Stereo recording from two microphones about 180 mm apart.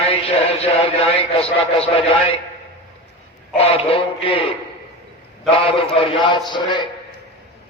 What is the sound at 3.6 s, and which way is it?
Mantra, 35° left (ahead or behind).